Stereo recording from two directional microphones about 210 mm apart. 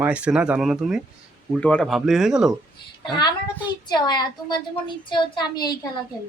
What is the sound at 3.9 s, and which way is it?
A woman's voice, 20° left (ahead or behind).